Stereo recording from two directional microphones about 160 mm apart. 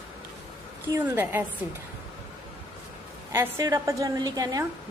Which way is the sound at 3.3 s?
20° right (ahead or behind).